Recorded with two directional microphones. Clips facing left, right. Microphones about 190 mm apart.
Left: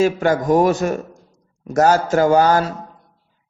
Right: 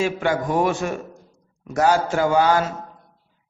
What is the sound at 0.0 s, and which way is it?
A man's voice, 40° left (ahead or behind).